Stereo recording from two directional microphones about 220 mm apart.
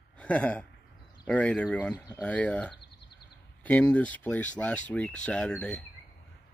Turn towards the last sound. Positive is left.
turn(degrees=5)  # may be behind; listen again after turning